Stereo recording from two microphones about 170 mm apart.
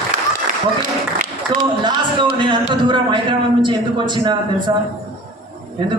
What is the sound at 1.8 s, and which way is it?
Speech, 30° right (ahead or behind).